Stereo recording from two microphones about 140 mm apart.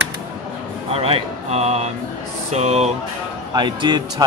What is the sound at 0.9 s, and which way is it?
Speech, 45° right (ahead or behind).